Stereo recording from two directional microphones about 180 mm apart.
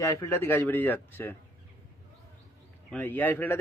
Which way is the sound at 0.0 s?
15° left (ahead or behind).